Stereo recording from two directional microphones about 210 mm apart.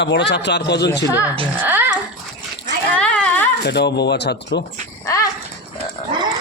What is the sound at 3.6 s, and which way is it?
Speech, 50° left (ahead or behind).